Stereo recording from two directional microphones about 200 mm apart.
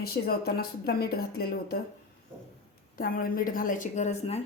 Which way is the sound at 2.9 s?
45° left (ahead or behind).